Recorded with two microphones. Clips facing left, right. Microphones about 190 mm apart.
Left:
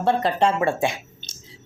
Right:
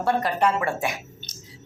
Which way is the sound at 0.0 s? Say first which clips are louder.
Left 2 dB; 25° left (ahead or behind).